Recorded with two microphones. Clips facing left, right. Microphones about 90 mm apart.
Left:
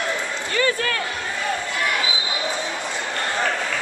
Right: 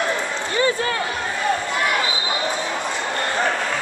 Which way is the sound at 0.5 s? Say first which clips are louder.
Right 1 dB; 25° right (ahead or behind).